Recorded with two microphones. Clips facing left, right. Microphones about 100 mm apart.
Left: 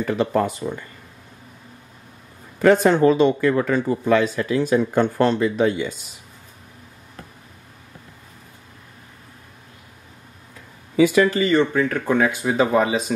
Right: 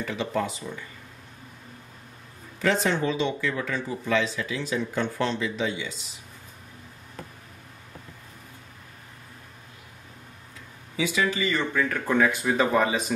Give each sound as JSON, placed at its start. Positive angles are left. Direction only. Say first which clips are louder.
{"t": 0.0, "sound": "speech", "louder": "left 8 dB", "side_deg": 50}
{"t": 2.6, "sound": "speech", "louder": "left 10 dB", "side_deg": 55}
{"t": 11.0, "sound": "speech", "louder": "left 10 dB", "side_deg": 50}
{"t": 11.3, "sound": "speech", "louder": "left 9 dB", "side_deg": 35}
{"t": 11.7, "sound": "speech", "louder": "left 5 dB", "side_deg": 15}